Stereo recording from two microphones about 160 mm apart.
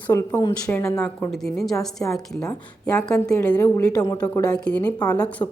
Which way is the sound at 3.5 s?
20° left (ahead or behind).